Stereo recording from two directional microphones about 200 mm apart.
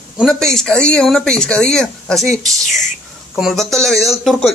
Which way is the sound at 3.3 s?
Centre (ahead or behind).